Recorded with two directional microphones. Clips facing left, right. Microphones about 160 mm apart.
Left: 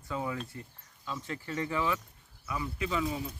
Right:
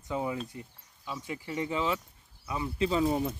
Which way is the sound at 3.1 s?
55° right (ahead or behind).